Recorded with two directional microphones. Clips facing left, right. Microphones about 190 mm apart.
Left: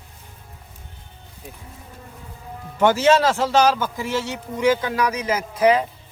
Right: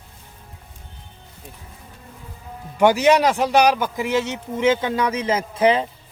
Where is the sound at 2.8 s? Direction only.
15° right (ahead or behind).